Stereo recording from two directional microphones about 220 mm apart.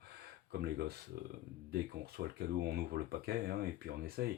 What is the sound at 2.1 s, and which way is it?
Speech, 45° right (ahead or behind).